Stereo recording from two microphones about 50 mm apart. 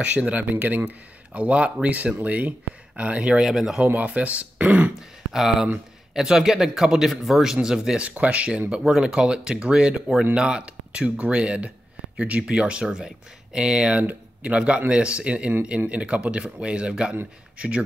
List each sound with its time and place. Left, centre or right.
0.0 s speech: right
3.4 s speech: centre
3.8 s speech: right
4.9 s speech: centre
8.2 s speech: right